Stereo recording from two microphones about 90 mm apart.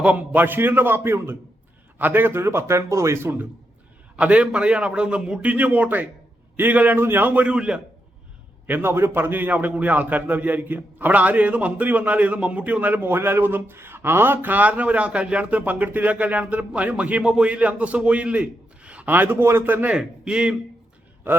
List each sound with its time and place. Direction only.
0.0 s a man's voice: 15° right (ahead or behind)
4.2 s a man's voice: 10° right (ahead or behind)
8.6 s a man's voice: 25° right (ahead or behind)